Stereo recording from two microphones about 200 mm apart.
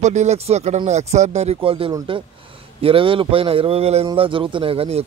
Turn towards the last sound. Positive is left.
turn(degrees=-30)  # may be behind; listen again after turning